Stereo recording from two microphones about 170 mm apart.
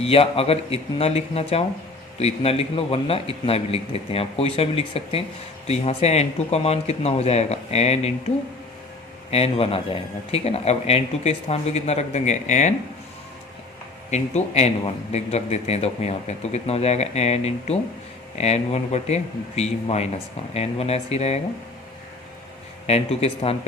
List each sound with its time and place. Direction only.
0.0 s a man's voice: 35° left (ahead or behind)
9.3 s a man's voice: 35° left (ahead or behind)
14.1 s a man's voice: 40° left (ahead or behind)
22.9 s a man's voice: 35° left (ahead or behind)